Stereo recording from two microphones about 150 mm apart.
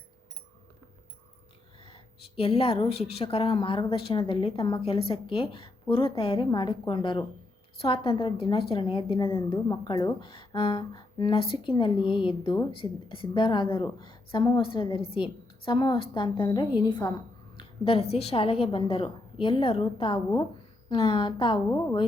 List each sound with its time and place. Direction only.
1.8 s a woman's voice: 40° left (ahead or behind)
16.8 s a sound: 25° left (ahead or behind)
17.8 s a woman's voice: 40° left (ahead or behind)